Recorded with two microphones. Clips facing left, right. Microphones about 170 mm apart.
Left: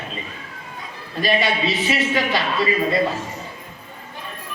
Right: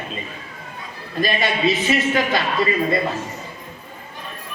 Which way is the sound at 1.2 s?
45° right (ahead or behind).